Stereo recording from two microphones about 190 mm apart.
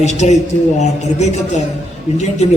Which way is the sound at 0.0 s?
35° left (ahead or behind).